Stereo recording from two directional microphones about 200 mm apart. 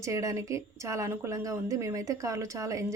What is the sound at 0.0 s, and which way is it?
A woman's voice, 15° right (ahead or behind).